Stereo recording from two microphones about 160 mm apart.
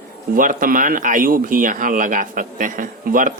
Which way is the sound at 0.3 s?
60° right (ahead or behind).